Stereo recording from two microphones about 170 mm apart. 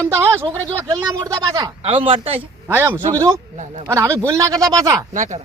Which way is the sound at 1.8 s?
35° right (ahead or behind).